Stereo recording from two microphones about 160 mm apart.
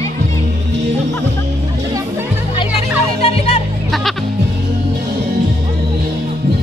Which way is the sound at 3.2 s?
40° left (ahead or behind).